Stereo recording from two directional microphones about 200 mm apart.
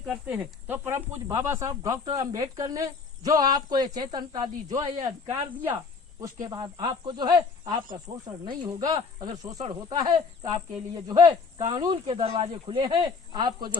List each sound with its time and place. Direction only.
0.0 s speech: 10° right (ahead or behind); by 5.3 s 25° right (ahead or behind)
5.3 s speech: 10° right (ahead or behind)